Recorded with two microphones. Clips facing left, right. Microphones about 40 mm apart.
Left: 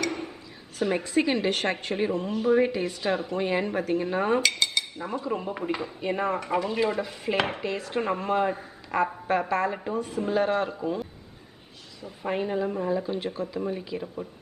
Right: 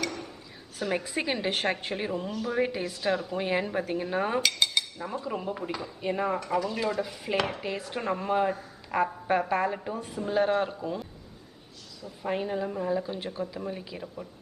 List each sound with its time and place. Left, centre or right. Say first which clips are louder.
0.7 s a woman's voice: left 5 dB; centre
2.9 s speech: left 1 dB; centre
3.3 s a woman's voice: left 2 dB; centre
4.9 s speech: left 3 dB; left
5.2 s speech: left 3 dB; centre
6.4 s speech: left 3 dB; left
7.0 s speech: left 2 dB; centre
7.3 s speech: left 1 dB; left
7.6 s a woman's voice: left 3 dB; centre
12.2 s a woman's voice: left 2 dB; centre